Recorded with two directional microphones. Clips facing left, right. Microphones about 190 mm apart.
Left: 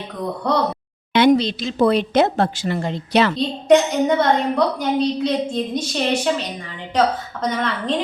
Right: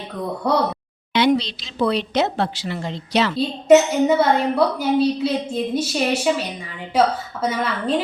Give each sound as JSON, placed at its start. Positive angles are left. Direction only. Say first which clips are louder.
{"t": 0.4, "sound": "a woman's voice", "louder": "right 1 dB", "side_deg": -10}
{"t": 1.1, "sound": "a woman's voice", "louder": "left 3 dB", "side_deg": 50}
{"t": 3.3, "sound": "a woman's voice", "louder": "right 5 dB", "side_deg": -5}